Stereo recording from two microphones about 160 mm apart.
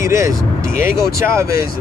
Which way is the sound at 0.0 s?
20° right (ahead or behind).